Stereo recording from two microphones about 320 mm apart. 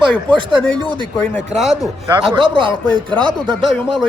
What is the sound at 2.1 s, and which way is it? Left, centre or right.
Speech, centre.